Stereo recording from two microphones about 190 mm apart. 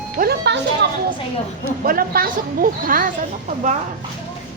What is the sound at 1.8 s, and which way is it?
Speech, 50° right (ahead or behind).